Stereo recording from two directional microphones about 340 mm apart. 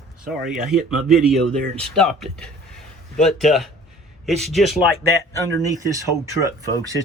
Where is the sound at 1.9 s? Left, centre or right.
Centre.